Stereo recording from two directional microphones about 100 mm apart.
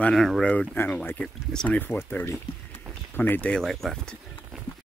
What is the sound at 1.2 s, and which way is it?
Speech, 5° left (ahead or behind).